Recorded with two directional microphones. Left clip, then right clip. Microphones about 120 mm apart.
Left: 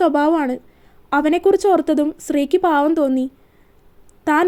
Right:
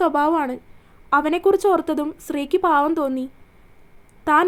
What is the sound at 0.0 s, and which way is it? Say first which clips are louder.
A woman's voice: left 3 dB; 30° left (ahead or behind).